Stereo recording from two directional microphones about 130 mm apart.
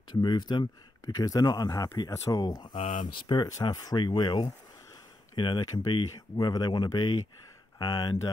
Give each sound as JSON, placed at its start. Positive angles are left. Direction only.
{"t": 0.2, "sound": "speech", "side_deg": 35}